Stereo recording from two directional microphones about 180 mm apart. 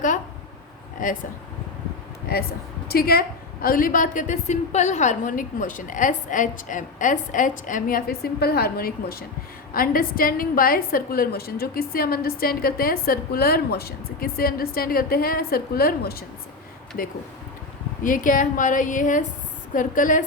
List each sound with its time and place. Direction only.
1.0 s a woman's voice: 45° left (ahead or behind)
2.2 s a woman's voice: 60° left (ahead or behind)
18.0 s a woman's voice: 50° left (ahead or behind)